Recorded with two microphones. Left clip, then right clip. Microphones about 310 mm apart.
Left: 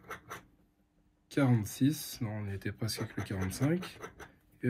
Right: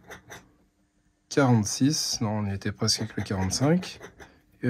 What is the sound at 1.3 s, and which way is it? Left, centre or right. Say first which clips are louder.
Speech: right 9 dB; centre.